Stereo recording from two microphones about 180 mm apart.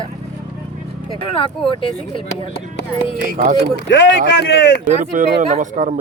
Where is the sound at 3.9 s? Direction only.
80° left.